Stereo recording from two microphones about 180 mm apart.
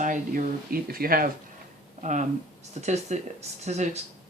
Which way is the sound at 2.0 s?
45° right (ahead or behind).